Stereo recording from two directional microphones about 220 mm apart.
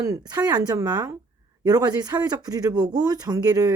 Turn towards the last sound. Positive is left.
turn(degrees=-15)  # may be behind; listen again after turning